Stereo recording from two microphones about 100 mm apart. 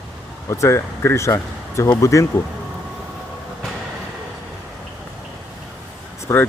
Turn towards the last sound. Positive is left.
turn(degrees=30)  # may be behind; listen again after turning